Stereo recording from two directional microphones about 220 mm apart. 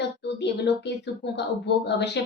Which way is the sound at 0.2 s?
50° left (ahead or behind).